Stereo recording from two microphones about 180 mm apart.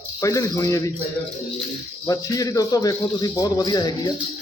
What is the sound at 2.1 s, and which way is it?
A man's voice, 20° left (ahead or behind).